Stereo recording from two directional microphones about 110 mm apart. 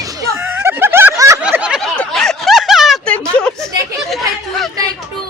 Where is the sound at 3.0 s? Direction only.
10° left (ahead or behind).